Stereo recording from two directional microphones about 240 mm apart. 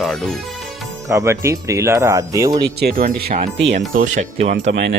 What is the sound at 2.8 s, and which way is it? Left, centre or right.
Speech, right.